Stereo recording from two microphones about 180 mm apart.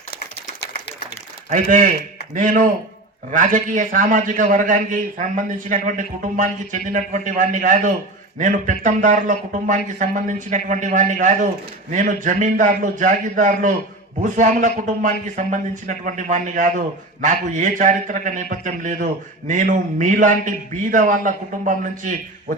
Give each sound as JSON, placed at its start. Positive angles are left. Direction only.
{"t": 1.5, "sound": "a man's voice", "side_deg": -50}